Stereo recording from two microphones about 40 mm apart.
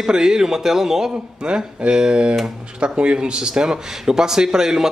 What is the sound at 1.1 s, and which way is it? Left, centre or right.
Speech, right.